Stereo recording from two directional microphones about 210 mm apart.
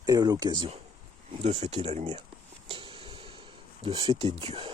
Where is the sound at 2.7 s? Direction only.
25° right (ahead or behind).